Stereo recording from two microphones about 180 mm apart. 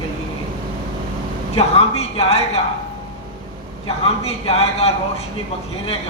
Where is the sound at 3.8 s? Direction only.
35° left (ahead or behind).